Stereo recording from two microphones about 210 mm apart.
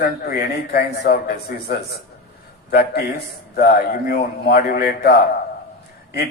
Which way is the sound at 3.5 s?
45° left (ahead or behind).